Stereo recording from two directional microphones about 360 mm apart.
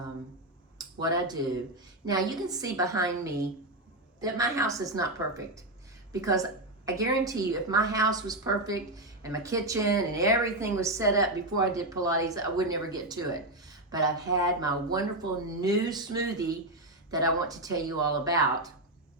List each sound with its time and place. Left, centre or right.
0.8 s a woman's voice: centre